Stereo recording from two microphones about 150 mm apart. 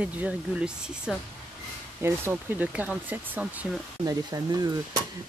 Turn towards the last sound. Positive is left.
turn(degrees=-25)  # may be behind; listen again after turning